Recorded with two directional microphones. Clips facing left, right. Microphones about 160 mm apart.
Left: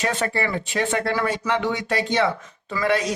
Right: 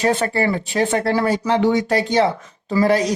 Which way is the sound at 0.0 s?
35° right (ahead or behind).